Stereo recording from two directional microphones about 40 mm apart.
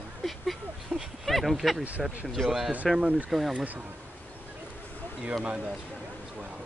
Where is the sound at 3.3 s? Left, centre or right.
Centre.